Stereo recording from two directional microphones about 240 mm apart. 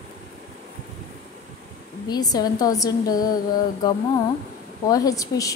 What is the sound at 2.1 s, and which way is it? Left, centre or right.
A woman's voice, centre.